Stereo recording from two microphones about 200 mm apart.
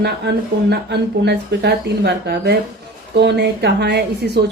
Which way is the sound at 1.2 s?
55° right (ahead or behind).